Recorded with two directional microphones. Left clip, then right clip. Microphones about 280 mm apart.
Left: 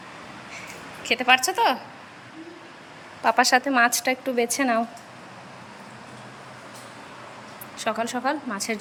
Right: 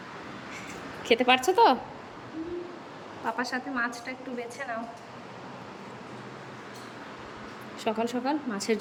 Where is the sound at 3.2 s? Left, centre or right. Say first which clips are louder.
Left 12 dB; left.